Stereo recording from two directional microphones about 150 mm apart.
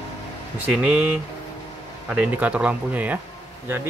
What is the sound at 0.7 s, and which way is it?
Speech, 10° right (ahead or behind).